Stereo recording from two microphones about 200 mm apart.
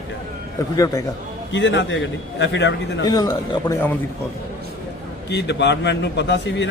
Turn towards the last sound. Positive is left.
turn(degrees=60)  # may be behind; listen again after turning